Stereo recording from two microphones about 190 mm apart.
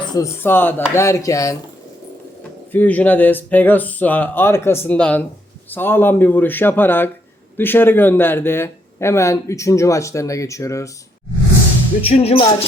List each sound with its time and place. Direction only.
0.0 s chopping: 20° left (ahead or behind)
0.3 s speech: 10° left (ahead or behind)
2.7 s speech: 10° left (ahead or behind)
12.0 s music: 30° left (ahead or behind)